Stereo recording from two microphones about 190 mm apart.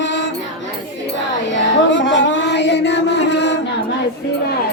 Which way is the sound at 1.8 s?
75° left (ahead or behind).